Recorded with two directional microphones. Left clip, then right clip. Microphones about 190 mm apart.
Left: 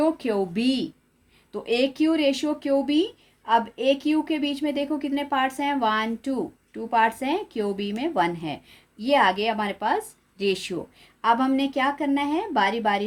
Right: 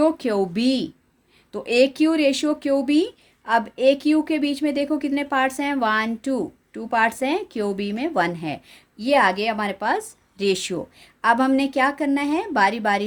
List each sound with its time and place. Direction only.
0.0 s speech: 30° right (ahead or behind)